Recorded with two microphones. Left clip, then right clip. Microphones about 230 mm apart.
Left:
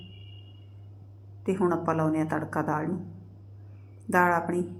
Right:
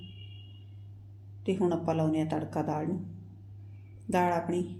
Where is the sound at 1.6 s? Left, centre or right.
Left.